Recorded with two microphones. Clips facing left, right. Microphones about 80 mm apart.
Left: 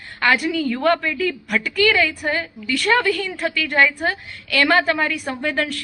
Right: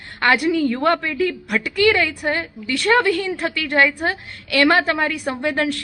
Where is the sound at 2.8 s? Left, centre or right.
Right.